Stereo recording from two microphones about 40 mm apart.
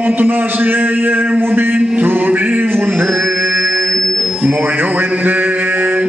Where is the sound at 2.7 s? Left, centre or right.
Right.